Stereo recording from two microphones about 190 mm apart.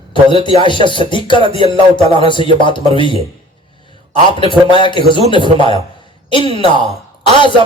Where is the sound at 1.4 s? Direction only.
30° right (ahead or behind).